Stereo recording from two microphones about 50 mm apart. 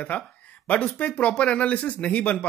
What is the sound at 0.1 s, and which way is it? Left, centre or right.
Speech, left.